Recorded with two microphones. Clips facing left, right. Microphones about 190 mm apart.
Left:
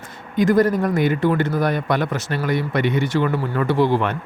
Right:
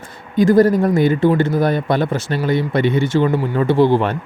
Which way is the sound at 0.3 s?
30° right (ahead or behind).